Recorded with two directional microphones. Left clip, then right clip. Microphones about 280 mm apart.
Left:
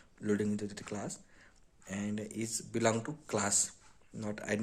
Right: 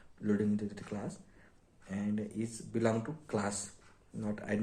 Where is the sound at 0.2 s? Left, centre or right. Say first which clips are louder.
Even; left.